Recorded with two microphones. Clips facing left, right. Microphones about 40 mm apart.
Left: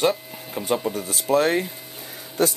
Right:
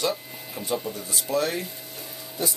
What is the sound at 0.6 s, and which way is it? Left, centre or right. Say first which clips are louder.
Speech: left 5 dB; left.